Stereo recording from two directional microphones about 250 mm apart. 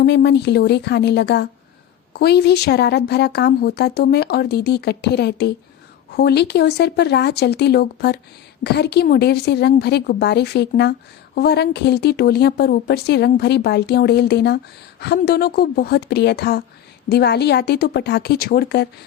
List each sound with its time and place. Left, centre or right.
0.0 s a woman's voice: left